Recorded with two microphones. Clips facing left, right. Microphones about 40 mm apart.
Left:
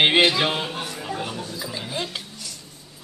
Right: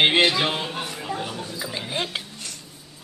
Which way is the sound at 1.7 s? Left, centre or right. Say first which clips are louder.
Right 2 dB; right.